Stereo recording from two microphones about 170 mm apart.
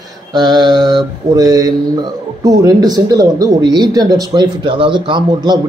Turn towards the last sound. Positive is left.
turn(degrees=-25)  # may be behind; listen again after turning